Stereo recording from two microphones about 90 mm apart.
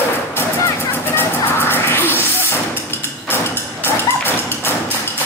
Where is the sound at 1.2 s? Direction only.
25° left (ahead or behind).